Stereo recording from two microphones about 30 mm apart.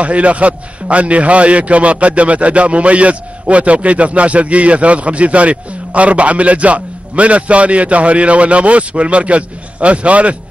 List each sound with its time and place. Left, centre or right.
0.0 s a man's voice: right